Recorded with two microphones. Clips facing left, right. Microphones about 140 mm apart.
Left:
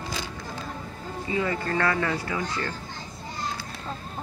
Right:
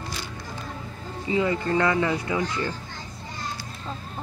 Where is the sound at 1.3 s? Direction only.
20° right (ahead or behind).